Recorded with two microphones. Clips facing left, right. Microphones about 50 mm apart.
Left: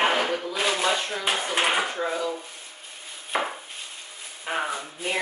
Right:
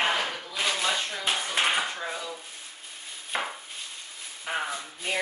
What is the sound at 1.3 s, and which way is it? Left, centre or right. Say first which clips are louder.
Dishes: left 2 dB; left.